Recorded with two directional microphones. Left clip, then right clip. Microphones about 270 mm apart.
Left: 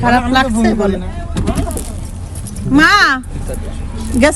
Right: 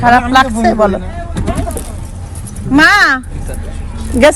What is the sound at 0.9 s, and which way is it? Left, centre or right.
Vehicle, centre.